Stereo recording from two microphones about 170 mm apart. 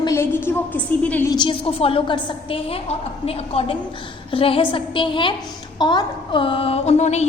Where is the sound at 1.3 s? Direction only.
30° left (ahead or behind).